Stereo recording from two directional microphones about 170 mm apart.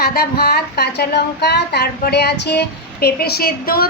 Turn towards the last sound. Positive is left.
turn(degrees=60)  # may be behind; listen again after turning